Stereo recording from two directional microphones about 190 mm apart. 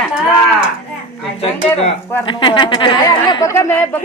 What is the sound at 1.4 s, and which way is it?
A woman's voice, 30° left (ahead or behind).